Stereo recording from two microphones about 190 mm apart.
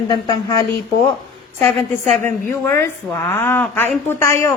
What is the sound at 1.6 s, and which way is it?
A man's voice, 10° left (ahead or behind).